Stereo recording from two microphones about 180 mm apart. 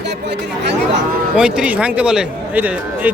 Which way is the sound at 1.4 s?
5° right (ahead or behind).